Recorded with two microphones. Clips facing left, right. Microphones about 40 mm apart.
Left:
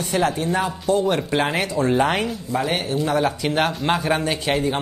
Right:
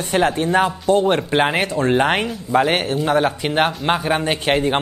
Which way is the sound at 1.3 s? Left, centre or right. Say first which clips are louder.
Right 4 dB; right.